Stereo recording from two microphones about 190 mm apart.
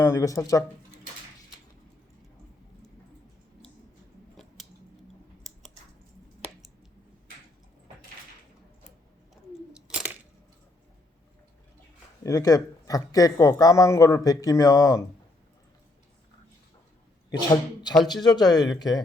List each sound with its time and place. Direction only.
0.0 s speech: 15° left (ahead or behind)
12.2 s speech: 15° left (ahead or behind)
18.0 s speech: 20° left (ahead or behind)